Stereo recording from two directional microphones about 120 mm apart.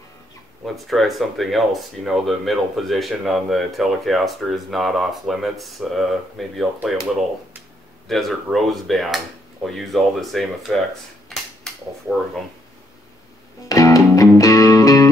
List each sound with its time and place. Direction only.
0.8 s speech: centre (ahead or behind)
8.1 s speech: centre (ahead or behind)
11.2 s cap gun: 5° left (ahead or behind)
13.7 s music: 30° left (ahead or behind)